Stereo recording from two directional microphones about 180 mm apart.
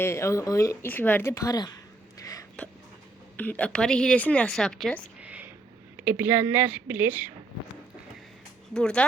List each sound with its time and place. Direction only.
0.0 s speech: 15° left (ahead or behind)
3.3 s speech: 10° left (ahead or behind)
5.2 s a sound: 5° right (ahead or behind)
6.0 s a woman's voice: 10° right (ahead or behind)
8.7 s speech: 5° left (ahead or behind)